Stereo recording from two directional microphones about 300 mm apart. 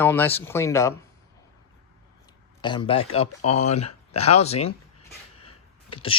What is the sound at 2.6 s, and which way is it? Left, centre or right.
Speech, centre.